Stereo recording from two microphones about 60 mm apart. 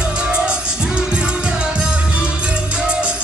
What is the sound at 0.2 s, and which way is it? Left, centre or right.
Music, centre.